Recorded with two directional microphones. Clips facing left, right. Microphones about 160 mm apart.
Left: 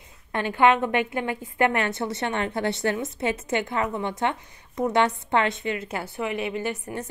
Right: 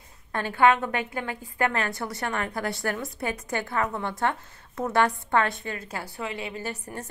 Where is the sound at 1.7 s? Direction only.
25° left (ahead or behind).